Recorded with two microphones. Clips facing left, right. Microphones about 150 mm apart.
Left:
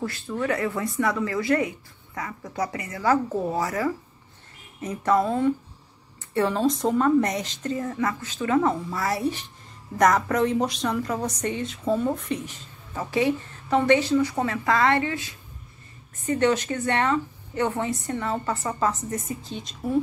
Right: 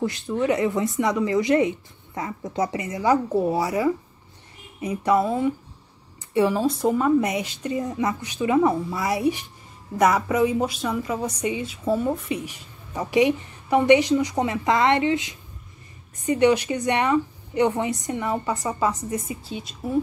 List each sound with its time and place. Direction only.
0.0 s a woman's voice: 20° right (ahead or behind)